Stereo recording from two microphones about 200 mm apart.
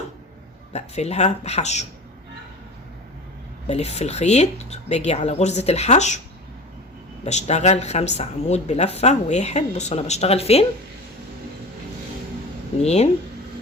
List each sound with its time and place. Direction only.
0.7 s a woman's voice: 35° left (ahead or behind)
3.7 s a woman's voice: 35° left (ahead or behind)
7.3 s a woman's voice: 35° left (ahead or behind)
12.8 s a woman's voice: 35° left (ahead or behind)